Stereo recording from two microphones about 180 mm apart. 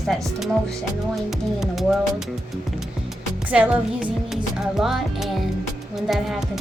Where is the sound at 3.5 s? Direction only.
5° right (ahead or behind).